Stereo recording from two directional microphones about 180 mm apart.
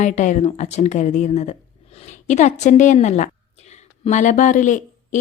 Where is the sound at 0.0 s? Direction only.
45° left (ahead or behind).